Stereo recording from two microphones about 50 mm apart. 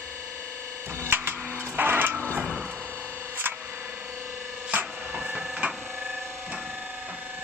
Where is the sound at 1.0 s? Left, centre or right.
Right.